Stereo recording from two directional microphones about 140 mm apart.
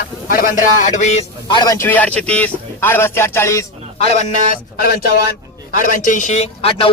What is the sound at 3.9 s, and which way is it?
Speech, 55° left (ahead or behind).